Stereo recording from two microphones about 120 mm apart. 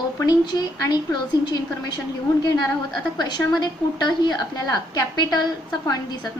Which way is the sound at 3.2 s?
35° left (ahead or behind).